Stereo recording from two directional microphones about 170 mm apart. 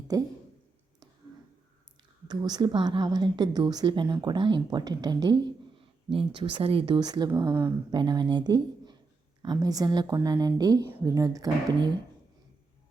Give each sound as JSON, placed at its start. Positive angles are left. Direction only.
{"t": 0.1, "sound": "a woman's voice", "side_deg": -20}
{"t": 2.2, "sound": "a woman's voice", "side_deg": -25}